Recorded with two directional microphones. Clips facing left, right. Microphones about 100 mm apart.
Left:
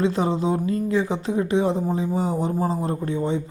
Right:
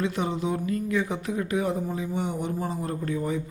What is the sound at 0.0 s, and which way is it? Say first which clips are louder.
Speech: left 6 dB; 30° left (ahead or behind).